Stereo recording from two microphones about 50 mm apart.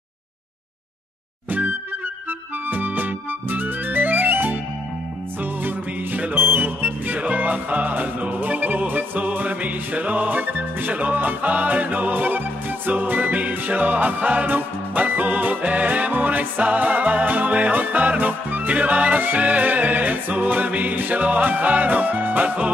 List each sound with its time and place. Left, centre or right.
2.7 s music: right
6.1 s music: right